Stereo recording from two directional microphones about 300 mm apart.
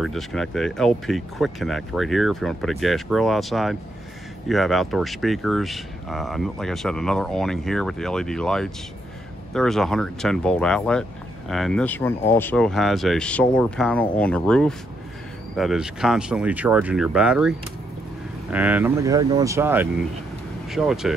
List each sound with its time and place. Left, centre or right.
0.0 s speech: centre